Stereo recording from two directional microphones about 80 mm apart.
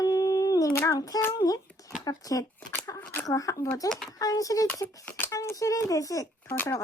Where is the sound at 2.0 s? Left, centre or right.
Left.